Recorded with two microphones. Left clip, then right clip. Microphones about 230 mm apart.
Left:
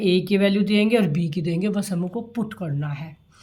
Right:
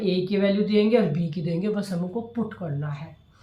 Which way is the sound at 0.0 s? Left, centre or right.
Left.